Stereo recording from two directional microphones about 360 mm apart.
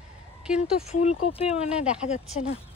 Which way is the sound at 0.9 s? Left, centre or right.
Centre.